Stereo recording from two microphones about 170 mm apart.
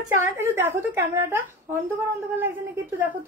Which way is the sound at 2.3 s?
15° right (ahead or behind).